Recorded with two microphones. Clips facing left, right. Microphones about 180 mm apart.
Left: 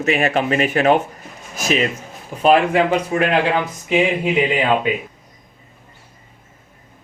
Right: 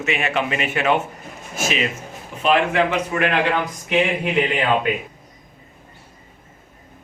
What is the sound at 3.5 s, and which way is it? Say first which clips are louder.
Speech: left 3 dB; 10° left (ahead or behind).